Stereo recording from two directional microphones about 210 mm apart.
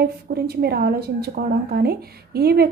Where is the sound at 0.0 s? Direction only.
50° right (ahead or behind).